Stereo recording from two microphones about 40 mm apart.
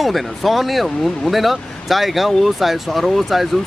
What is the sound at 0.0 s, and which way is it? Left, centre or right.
Speech, centre.